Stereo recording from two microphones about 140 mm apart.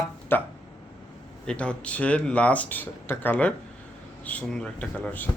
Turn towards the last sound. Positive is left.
turn(degrees=10)  # may be behind; listen again after turning